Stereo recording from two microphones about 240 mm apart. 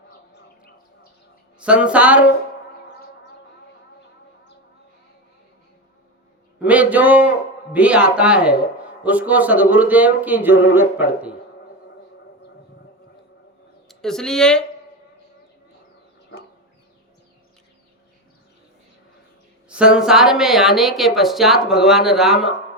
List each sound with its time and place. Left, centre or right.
1.5 s speech: centre
6.6 s a man's voice: centre
13.8 s speech: centre
19.6 s speech: centre